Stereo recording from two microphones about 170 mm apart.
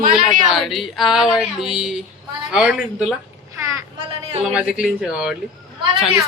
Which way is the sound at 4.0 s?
30° right (ahead or behind).